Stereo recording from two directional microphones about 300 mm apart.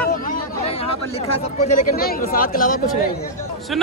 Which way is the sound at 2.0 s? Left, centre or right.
Left.